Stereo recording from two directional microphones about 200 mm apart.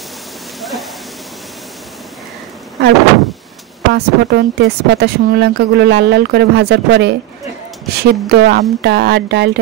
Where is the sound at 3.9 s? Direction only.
55° right (ahead or behind).